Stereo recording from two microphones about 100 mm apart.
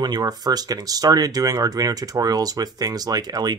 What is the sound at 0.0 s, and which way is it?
Speech, 45° right (ahead or behind).